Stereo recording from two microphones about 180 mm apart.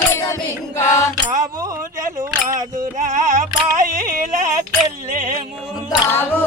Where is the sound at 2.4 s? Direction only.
45° right (ahead or behind).